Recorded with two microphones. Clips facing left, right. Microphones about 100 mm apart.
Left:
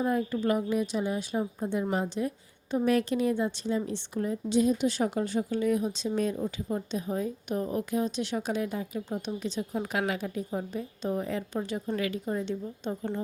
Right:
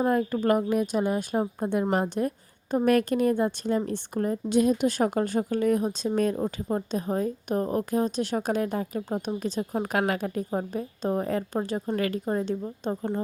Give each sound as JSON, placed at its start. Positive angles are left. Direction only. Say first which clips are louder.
{"t": 0.0, "sound": "a woman's voice", "louder": "right 4 dB", "side_deg": -55}